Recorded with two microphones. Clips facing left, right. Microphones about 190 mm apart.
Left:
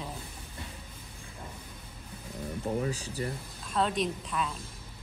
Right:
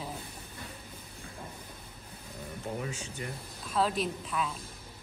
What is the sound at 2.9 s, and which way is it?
Speech, 35° left (ahead or behind).